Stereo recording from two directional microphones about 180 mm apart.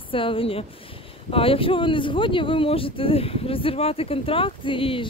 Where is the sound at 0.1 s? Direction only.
30° left (ahead or behind).